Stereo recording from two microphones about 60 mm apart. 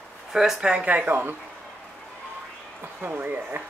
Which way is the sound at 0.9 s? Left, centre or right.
Right.